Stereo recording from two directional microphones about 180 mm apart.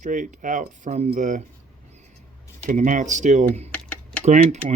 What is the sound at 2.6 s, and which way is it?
Speech, 45° right (ahead or behind).